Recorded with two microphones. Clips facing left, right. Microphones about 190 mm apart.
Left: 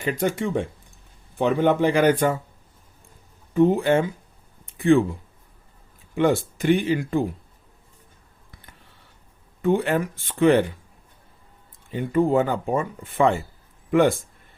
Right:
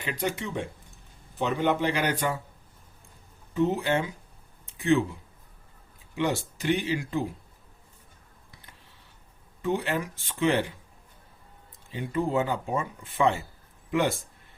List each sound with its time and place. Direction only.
0.0 s speech: 50° left (ahead or behind)
3.5 s speech: 50° left (ahead or behind)
4.6 s a sound: 55° left (ahead or behind)
6.1 s speech: 50° left (ahead or behind)
9.6 s speech: 55° left (ahead or behind)
11.9 s speech: 50° left (ahead or behind)